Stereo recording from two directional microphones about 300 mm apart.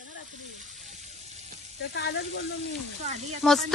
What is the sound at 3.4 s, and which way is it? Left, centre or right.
Speech, centre.